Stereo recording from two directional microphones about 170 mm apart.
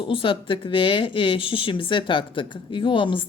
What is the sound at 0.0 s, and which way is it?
Speech, 30° left (ahead or behind).